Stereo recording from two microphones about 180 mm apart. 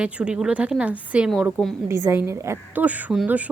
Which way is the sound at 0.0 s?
5° right (ahead or behind).